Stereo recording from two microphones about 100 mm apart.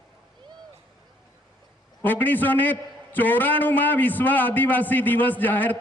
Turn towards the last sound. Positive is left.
turn(degrees=15)  # may be behind; listen again after turning